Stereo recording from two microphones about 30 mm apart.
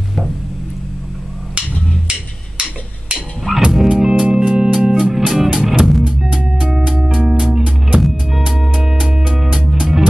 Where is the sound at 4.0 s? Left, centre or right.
Centre.